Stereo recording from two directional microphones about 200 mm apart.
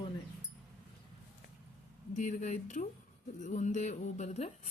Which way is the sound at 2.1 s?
35° left (ahead or behind).